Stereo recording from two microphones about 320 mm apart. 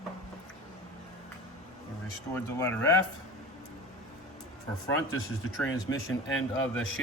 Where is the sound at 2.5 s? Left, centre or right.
Centre.